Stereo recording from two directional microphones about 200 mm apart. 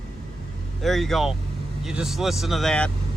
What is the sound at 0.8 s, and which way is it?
Vehicle, centre (ahead or behind).